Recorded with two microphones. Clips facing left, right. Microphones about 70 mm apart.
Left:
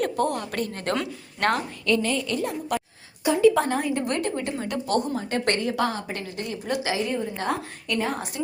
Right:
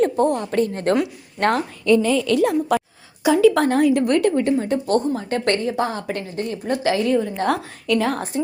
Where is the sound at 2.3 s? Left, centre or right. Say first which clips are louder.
Right 9 dB; right.